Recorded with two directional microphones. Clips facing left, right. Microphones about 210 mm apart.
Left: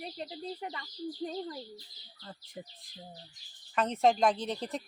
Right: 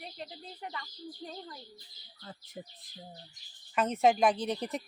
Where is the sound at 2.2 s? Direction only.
5° right (ahead or behind).